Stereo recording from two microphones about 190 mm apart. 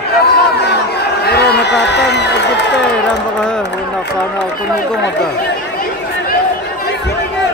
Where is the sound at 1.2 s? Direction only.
60° left (ahead or behind).